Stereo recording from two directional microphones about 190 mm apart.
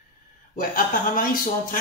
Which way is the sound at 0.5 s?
45° left (ahead or behind).